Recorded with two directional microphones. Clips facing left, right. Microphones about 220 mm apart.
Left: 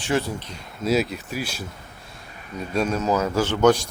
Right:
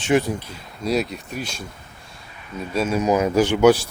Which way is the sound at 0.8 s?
Centre (ahead or behind).